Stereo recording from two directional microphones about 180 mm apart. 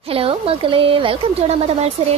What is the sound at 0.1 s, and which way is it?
Speech, 30° right (ahead or behind).